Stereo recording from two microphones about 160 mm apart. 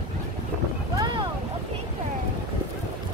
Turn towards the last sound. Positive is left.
turn(degrees=-30)  # may be behind; listen again after turning